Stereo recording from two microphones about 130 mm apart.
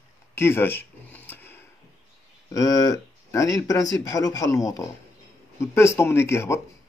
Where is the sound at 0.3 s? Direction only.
20° left (ahead or behind).